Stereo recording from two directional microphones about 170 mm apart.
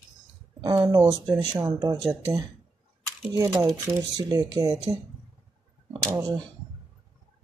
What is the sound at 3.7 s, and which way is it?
Speech, 20° right (ahead or behind).